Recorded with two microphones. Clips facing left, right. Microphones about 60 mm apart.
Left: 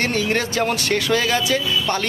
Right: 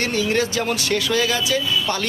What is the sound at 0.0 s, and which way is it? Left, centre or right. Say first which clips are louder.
Speech: even; left.